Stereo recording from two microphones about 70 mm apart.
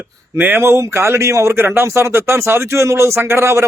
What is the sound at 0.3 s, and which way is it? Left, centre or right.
A man's voice, right.